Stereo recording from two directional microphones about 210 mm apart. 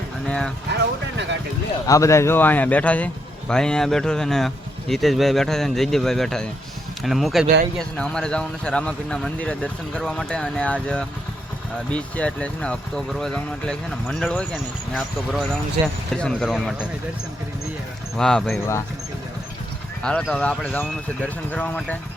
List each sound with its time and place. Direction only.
0.3 s speech: 5° left (ahead or behind)
0.8 s vehicle: 55° right (ahead or behind)
1.9 s speech: 15° left (ahead or behind)
18.2 s speech: centre (ahead or behind)
20.0 s speech: 5° left (ahead or behind)